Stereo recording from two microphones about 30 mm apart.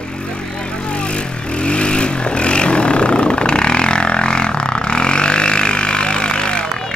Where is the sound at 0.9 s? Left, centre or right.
Left.